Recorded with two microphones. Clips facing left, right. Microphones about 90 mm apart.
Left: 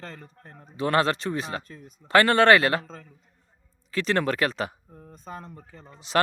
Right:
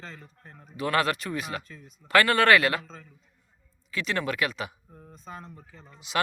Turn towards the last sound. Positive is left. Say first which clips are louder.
# left 5 dB
turn(degrees=35)  # may be behind; listen again after turning